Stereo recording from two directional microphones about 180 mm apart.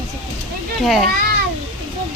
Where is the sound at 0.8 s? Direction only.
Centre (ahead or behind).